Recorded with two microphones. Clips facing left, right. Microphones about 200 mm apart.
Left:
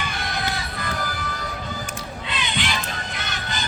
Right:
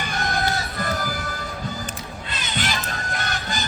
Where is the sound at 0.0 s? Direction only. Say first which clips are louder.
Right 3 dB; 45° right (ahead or behind).